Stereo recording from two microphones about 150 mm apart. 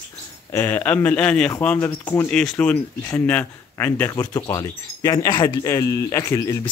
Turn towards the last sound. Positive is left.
turn(degrees=20)  # may be behind; listen again after turning